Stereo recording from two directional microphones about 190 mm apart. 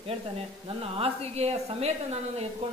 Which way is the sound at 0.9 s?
30° right (ahead or behind).